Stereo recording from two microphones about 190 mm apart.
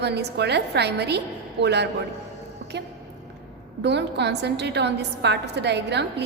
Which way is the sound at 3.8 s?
65° right (ahead or behind).